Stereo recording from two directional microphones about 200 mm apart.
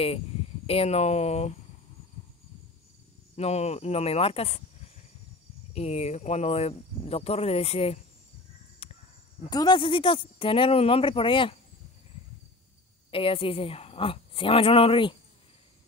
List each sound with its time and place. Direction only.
0.7 s speech: 30° left (ahead or behind)
3.3 s speech: 30° left (ahead or behind)
5.7 s speech: 30° left (ahead or behind)
8.8 s a sound: 30° left (ahead or behind)
9.5 s speech: 20° left (ahead or behind)
13.1 s speech: 25° left (ahead or behind)